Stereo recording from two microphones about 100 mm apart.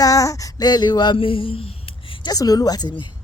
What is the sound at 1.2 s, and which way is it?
Speech, 65° left (ahead or behind).